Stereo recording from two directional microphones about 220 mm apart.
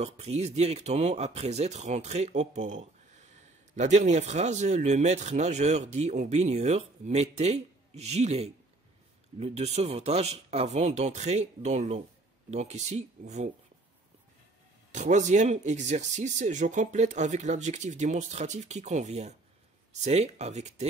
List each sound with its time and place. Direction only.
0.0 s speech: 30° right (ahead or behind)
14.9 s speech: 35° right (ahead or behind)